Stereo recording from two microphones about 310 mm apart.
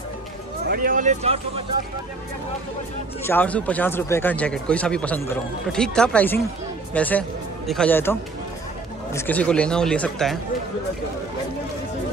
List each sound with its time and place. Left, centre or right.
0.7 s speech: right
3.3 s speech: centre